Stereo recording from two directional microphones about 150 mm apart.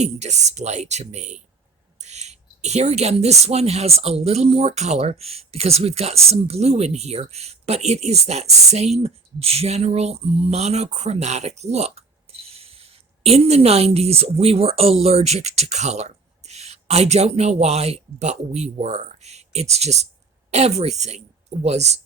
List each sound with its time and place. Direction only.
0.0 s speech: 50° right (ahead or behind)